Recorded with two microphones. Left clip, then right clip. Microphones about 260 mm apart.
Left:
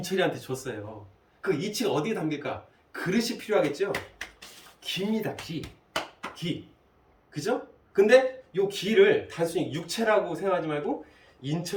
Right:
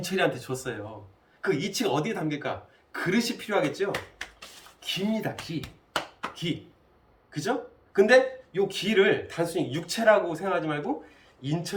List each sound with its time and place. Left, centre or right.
0.0 s speech: centre
7.3 s a sound: centre
7.9 s speech: centre